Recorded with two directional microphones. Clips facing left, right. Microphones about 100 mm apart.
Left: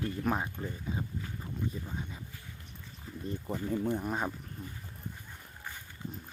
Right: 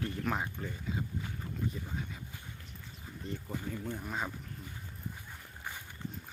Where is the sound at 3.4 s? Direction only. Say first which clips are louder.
Left 9 dB; 25° left (ahead or behind).